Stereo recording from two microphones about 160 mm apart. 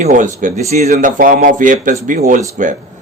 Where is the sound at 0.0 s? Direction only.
55° right (ahead or behind).